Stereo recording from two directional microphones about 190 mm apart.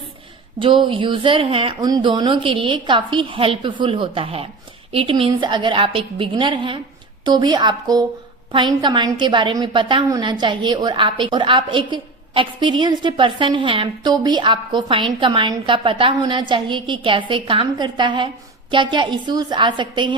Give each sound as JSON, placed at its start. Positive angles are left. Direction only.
{"t": 0.6, "sound": "a woman's voice", "side_deg": -25}